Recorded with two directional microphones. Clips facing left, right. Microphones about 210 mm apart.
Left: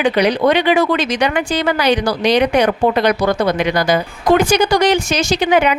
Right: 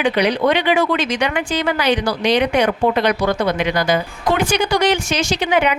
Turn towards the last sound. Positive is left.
turn(degrees=40)  # may be behind; listen again after turning